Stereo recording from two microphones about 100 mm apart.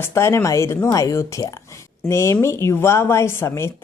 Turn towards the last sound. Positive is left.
turn(degrees=25)  # may be behind; listen again after turning